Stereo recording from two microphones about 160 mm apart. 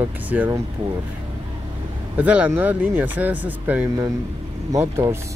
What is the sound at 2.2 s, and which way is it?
Speech, 10° right (ahead or behind).